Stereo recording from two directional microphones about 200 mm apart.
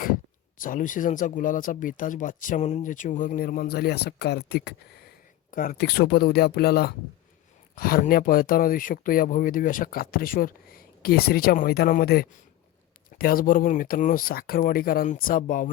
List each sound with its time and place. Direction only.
0.6 s speech: 40° left (ahead or behind)
5.5 s speech: 45° left (ahead or behind)